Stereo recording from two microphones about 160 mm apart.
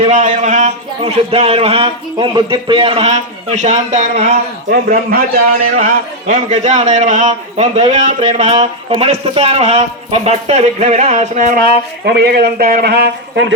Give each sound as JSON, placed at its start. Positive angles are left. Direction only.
{"t": 0.0, "sound": "speech", "side_deg": -50}
{"t": 4.7, "sound": "a man's voice", "side_deg": -65}